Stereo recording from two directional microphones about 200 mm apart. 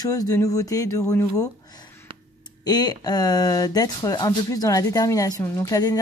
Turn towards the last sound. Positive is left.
turn(degrees=15)  # may be behind; listen again after turning